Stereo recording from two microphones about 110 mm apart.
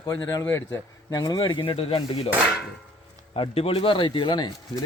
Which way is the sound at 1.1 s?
35° left (ahead or behind).